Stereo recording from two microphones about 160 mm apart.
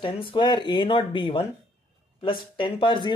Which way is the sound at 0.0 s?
30° left (ahead or behind).